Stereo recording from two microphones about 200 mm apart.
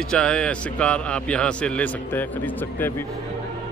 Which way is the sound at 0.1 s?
5° left (ahead or behind).